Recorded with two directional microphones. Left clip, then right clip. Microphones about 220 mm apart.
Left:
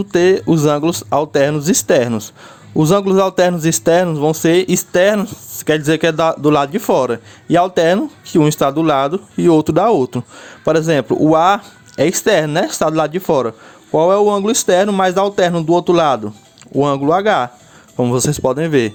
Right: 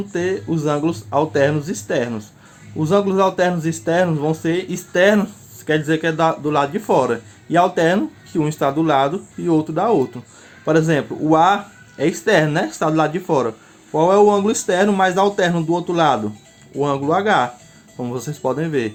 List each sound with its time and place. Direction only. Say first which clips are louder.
0.1 s speech: left 10 dB; 50° left (ahead or behind)